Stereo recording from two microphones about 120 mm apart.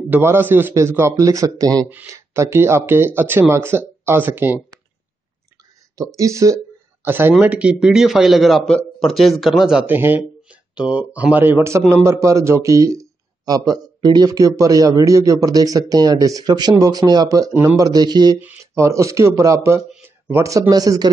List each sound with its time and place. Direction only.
0.1 s speech: 20° right (ahead or behind)
1.9 s speech: 20° right (ahead or behind)
5.9 s speech: 25° right (ahead or behind); by 9.8 s 5° right (ahead or behind)
9.8 s a man's voice: 15° right (ahead or behind); by 18.4 s 35° right (ahead or behind)
18.4 s speech: 20° right (ahead or behind)
19.9 s a sound: 20° right (ahead or behind)
20.7 s a man's voice: 30° right (ahead or behind)